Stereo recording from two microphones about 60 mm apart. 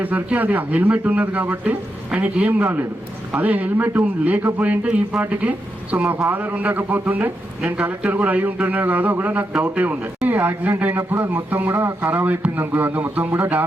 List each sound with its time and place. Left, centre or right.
0.0 s speech: right
2.5 s a man's voice: right
3.8 s a man's voice: right
12.1 s a man's voice: right